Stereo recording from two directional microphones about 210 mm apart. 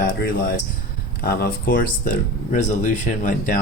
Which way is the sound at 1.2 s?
45° left (ahead or behind).